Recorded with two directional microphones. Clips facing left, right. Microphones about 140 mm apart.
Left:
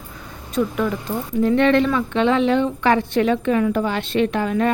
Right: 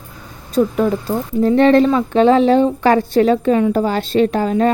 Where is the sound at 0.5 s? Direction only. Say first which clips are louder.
Right 6 dB; 35° right (ahead or behind).